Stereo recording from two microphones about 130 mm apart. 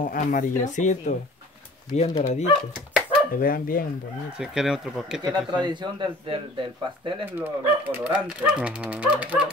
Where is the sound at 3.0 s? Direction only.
90° left.